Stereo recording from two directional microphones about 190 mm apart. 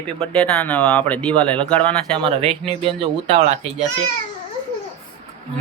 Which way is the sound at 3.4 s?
40° right (ahead or behind).